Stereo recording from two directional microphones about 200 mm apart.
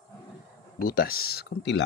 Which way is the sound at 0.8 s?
50° left (ahead or behind).